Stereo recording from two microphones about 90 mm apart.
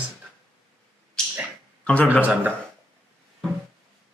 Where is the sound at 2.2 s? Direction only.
20° right (ahead or behind).